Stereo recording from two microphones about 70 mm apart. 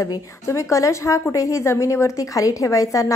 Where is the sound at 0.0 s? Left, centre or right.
Left.